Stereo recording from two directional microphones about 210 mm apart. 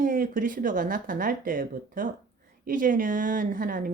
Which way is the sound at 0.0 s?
40° right (ahead or behind).